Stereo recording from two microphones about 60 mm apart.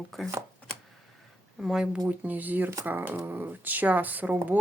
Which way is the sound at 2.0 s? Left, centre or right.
Right.